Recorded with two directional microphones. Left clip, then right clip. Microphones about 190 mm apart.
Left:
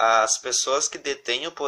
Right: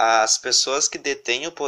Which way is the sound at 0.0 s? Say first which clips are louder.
Right 2 dB; 20° right (ahead or behind).